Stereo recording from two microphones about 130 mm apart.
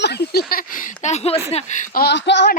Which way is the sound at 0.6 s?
90° left.